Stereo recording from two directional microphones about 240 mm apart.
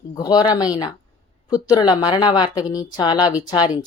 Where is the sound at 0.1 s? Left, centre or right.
Centre.